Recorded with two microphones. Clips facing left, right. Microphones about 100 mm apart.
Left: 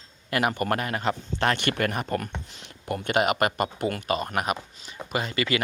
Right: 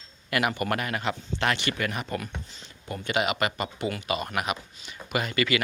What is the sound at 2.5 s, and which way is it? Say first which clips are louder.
Speech: left 5 dB; 60° left (ahead or behind).